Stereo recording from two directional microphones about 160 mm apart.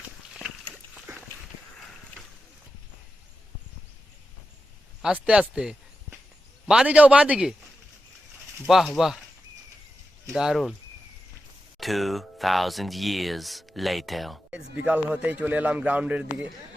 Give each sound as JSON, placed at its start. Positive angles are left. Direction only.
{"t": 5.0, "sound": "a man's voice", "side_deg": -5}
{"t": 8.6, "sound": "speech", "side_deg": 0}
{"t": 10.3, "sound": "speech", "side_deg": 0}
{"t": 11.8, "sound": "speech", "side_deg": 0}